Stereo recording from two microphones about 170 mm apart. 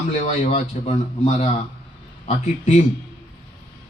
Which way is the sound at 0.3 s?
40° left (ahead or behind).